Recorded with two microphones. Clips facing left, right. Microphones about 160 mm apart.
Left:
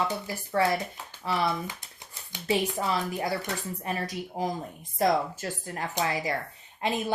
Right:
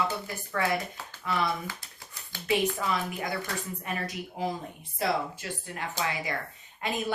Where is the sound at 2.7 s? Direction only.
35° left (ahead or behind).